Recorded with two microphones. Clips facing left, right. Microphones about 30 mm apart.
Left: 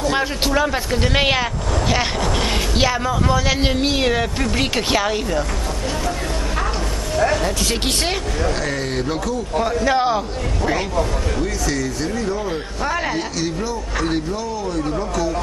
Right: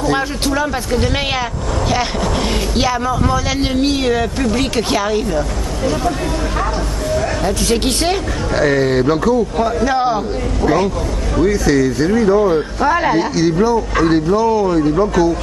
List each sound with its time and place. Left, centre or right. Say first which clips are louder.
0.0 s a man's voice: right 3 dB; centre
2.7 s a man's voice: right 2 dB; centre
7.4 s speech: right 5 dB; centre
8.5 s speech: right 9 dB; centre
9.8 s speech: right 2 dB; centre
11.6 s speech: right 8 dB; right
12.4 s speech: right 9 dB; centre
14.4 s speech: right 10 dB; right